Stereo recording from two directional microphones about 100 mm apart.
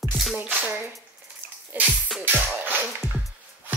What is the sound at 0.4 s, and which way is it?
Music, 20° right (ahead or behind).